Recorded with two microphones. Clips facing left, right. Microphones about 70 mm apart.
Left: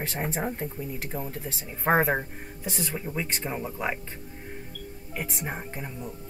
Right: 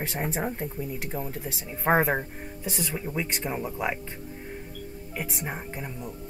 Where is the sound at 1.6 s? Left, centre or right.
Centre.